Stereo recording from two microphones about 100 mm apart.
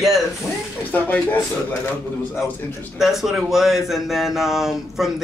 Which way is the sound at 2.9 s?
5° right (ahead or behind).